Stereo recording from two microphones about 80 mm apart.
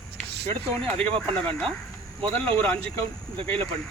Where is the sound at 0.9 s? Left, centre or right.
Centre.